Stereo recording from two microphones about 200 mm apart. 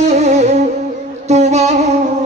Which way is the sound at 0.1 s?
35° right (ahead or behind).